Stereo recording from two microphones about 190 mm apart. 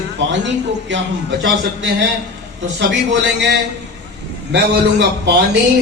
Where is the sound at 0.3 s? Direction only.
70° right (ahead or behind).